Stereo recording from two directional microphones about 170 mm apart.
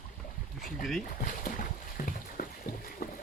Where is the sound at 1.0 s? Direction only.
55° left (ahead or behind).